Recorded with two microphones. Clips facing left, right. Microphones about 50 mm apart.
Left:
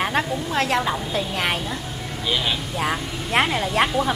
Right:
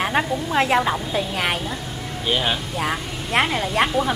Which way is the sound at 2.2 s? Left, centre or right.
Right.